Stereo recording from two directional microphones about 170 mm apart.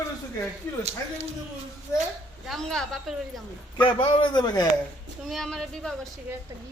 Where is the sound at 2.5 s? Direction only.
5° left (ahead or behind).